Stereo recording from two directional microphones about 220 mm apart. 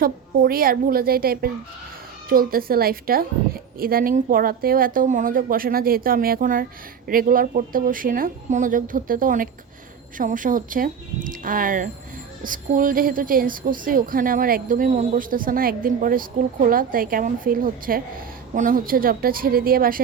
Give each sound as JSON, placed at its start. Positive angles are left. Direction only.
{"t": 0.0, "sound": "a woman's voice", "side_deg": -40}